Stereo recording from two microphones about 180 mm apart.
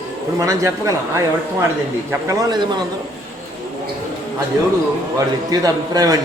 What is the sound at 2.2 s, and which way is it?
Speech, 20° right (ahead or behind).